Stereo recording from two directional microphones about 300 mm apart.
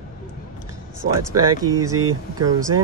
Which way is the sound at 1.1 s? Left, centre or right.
Right.